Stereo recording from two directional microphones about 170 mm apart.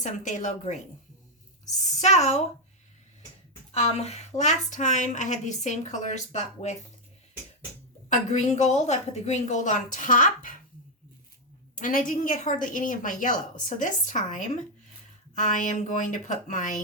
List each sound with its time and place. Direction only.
0.0 s a woman's voice: 45° left (ahead or behind)
2.0 s a woman's voice: 40° left (ahead or behind)
3.8 s a woman's voice: 40° left (ahead or behind)
8.1 s a woman's voice: 45° left (ahead or behind)
11.7 s a woman's voice: 50° left (ahead or behind)